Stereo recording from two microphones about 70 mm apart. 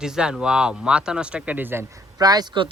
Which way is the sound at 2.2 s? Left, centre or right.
Right.